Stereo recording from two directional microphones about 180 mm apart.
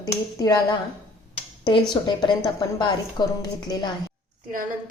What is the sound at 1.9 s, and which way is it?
A woman's voice, 25° left (ahead or behind).